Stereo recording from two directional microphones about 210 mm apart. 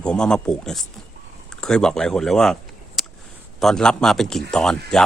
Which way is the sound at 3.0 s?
Centre (ahead or behind).